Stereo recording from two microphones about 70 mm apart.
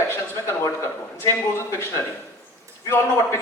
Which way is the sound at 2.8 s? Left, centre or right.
Left.